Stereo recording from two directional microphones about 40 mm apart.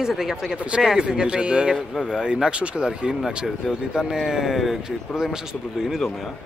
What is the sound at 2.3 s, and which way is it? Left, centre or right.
Speech, right.